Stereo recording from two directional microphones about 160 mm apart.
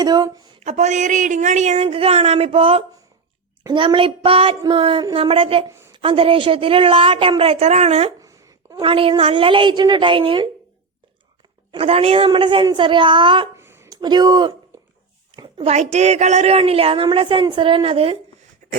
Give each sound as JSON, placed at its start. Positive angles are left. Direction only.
{"t": 0.0, "sound": "speech", "side_deg": -25}
{"t": 0.6, "sound": "a woman's voice", "side_deg": -45}
{"t": 8.2, "sound": "a sound", "side_deg": -20}
{"t": 8.8, "sound": "a woman's voice", "side_deg": -35}
{"t": 11.7, "sound": "a woman's voice", "side_deg": -40}
{"t": 13.6, "sound": "a sound", "side_deg": -15}
{"t": 13.9, "sound": "speech", "side_deg": -25}
{"t": 15.4, "sound": "a woman's voice", "side_deg": -35}